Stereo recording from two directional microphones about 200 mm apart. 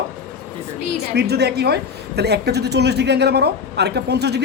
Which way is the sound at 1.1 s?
55° right (ahead or behind).